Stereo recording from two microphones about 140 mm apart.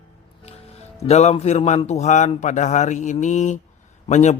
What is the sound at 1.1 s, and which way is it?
Speech, 50° left (ahead or behind).